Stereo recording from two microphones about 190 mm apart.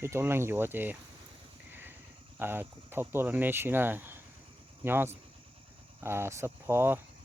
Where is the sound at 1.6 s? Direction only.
10° right (ahead or behind).